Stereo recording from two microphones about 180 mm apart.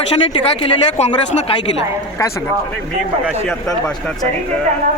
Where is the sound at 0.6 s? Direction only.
40° left (ahead or behind).